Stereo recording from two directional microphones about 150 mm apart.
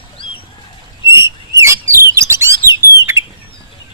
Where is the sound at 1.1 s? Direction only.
20° right (ahead or behind).